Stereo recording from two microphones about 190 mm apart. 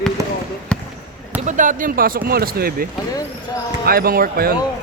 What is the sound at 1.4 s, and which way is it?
Speech, 40° right (ahead or behind).